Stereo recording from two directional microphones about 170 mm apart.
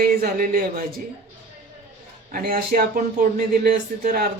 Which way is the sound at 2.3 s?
60° right (ahead or behind).